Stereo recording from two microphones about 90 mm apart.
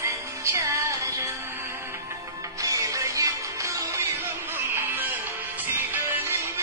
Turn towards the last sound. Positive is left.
turn(degrees=-25)  # may be behind; listen again after turning